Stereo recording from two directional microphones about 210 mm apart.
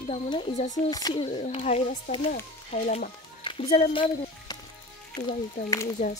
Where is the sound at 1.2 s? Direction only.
30° left (ahead or behind).